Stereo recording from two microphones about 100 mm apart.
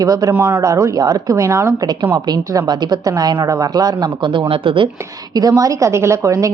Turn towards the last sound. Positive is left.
turn(degrees=-30)  # may be behind; listen again after turning